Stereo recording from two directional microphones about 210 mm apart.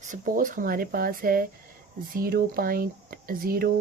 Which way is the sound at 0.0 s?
40° right (ahead or behind).